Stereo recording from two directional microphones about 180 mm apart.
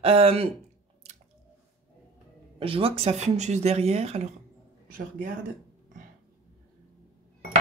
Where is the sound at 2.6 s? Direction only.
30° right (ahead or behind).